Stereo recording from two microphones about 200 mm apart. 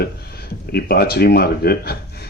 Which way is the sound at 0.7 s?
50° left (ahead or behind).